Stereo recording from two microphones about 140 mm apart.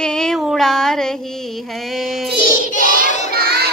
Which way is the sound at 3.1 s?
60° left (ahead or behind).